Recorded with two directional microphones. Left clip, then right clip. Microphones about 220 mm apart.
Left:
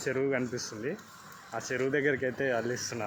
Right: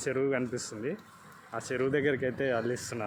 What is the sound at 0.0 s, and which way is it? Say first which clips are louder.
Speech: even; 15° right (ahead or behind).